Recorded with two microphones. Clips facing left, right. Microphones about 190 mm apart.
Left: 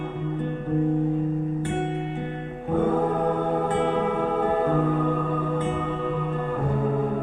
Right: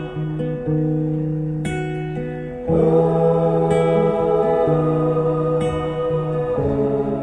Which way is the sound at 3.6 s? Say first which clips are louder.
Right 8 dB; 80° right.